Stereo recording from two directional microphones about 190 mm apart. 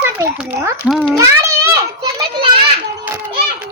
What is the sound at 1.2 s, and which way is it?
Children playing, 15° right (ahead or behind).